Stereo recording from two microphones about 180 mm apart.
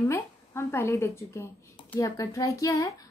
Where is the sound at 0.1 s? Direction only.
15° left (ahead or behind).